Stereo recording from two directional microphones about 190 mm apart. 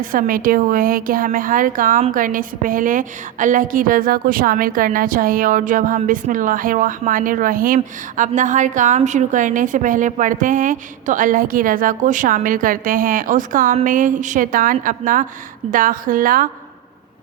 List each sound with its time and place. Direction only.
0.0 s a woman's voice: 45° right (ahead or behind)